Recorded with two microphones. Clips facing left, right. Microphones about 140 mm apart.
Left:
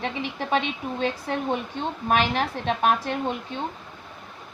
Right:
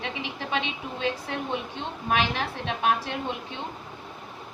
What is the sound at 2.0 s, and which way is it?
A woman's voice, 45° left (ahead or behind).